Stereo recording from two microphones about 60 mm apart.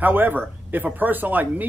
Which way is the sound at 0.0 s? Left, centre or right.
Right.